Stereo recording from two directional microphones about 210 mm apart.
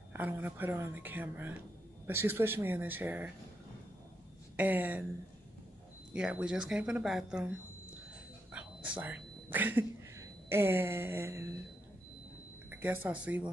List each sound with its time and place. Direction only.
0.1 s speech: 10° right (ahead or behind)
4.6 s speech: 10° right (ahead or behind)
6.1 s speech: 5° right (ahead or behind)
8.5 s whispering: 5° right (ahead or behind)
12.7 s speech: 10° right (ahead or behind)